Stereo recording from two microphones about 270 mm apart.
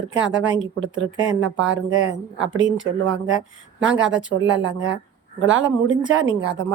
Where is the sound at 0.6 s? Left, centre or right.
Right.